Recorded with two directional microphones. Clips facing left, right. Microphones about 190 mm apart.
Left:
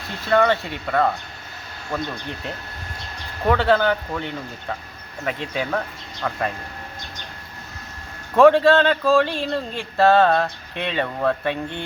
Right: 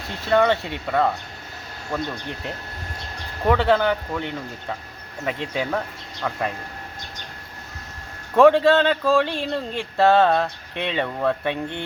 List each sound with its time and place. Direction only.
0.3 s speech: 20° right (ahead or behind)
8.4 s speech: 20° right (ahead or behind)